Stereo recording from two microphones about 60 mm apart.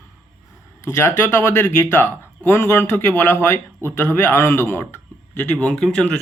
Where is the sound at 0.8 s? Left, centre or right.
Left.